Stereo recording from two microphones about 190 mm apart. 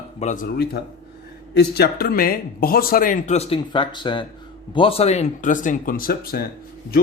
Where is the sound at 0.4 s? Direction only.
55° left (ahead or behind).